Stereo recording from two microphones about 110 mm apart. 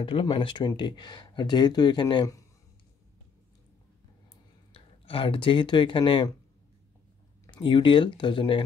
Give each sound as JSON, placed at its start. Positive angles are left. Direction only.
{"t": 0.0, "sound": "speech", "side_deg": 50}
{"t": 4.7, "sound": "speech", "side_deg": 55}
{"t": 7.5, "sound": "speech", "side_deg": 45}